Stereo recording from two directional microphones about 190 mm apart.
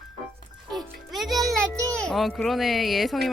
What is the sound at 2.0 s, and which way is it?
Speech, centre (ahead or behind).